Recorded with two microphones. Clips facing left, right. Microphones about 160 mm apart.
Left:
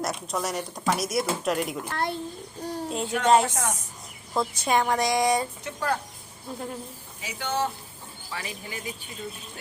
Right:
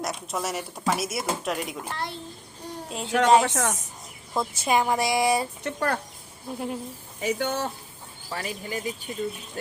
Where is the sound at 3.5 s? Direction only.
55° right (ahead or behind).